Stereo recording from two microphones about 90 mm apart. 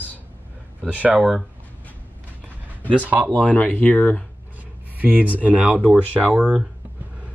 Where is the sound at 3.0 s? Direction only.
15° right (ahead or behind).